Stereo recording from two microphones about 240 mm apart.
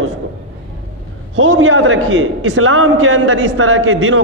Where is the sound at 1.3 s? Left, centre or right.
Right.